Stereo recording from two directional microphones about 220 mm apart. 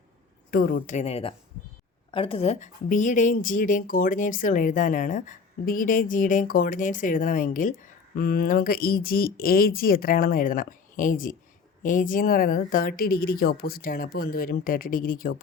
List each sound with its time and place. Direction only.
0.5 s speech: 40° left (ahead or behind)